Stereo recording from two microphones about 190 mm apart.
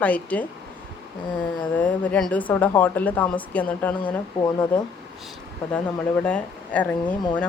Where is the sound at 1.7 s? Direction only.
10° left (ahead or behind).